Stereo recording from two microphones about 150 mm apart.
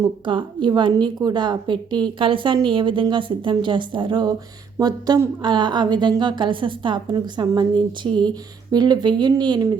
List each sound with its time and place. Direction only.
0.0 s a woman's voice: 30° right (ahead or behind)